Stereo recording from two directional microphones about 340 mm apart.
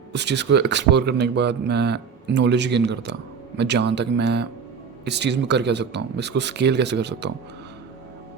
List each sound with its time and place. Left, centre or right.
0.1 s speech: right